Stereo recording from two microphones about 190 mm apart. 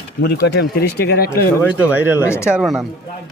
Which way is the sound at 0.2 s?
60° left (ahead or behind).